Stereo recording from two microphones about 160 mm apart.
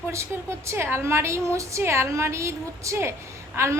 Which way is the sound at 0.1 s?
15° right (ahead or behind).